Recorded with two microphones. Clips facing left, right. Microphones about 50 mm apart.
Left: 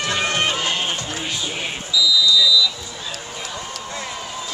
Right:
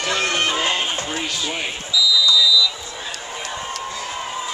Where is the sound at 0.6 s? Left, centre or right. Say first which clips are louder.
Right 2 dB; right.